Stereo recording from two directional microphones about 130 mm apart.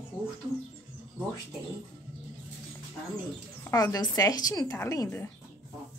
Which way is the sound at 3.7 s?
25° left (ahead or behind).